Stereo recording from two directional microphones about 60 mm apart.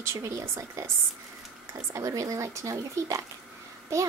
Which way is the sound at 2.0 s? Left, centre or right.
Right.